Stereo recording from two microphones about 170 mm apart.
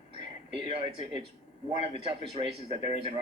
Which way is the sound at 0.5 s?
30° right (ahead or behind).